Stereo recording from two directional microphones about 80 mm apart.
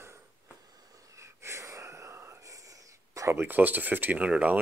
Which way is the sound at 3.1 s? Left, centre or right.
Right.